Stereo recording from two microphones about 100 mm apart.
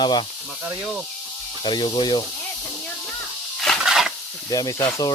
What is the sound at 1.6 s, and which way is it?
Speech, 50° left (ahead or behind).